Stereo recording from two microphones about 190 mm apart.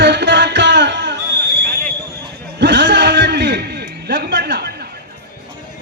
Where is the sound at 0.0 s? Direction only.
65° right (ahead or behind).